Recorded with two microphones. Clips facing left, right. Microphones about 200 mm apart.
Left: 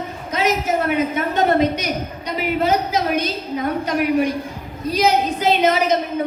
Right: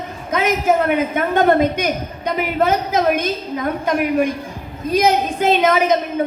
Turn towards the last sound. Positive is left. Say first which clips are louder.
# right 2 dB
turn(degrees=-50)  # may be behind; listen again after turning